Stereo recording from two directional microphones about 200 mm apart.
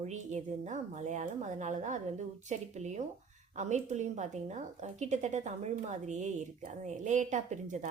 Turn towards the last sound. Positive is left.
turn(degrees=-35)  # may be behind; listen again after turning